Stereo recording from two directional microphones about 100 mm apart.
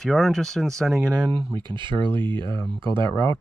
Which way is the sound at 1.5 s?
55° right (ahead or behind).